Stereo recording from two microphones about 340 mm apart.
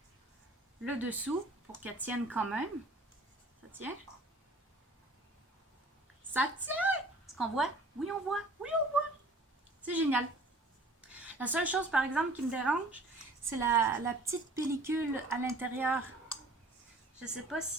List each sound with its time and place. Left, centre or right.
0.9 s speech: centre
3.7 s speech: centre
6.3 s a woman's voice: centre
9.8 s a woman's voice: centre